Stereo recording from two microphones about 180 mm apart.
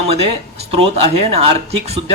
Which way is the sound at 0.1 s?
35° right (ahead or behind).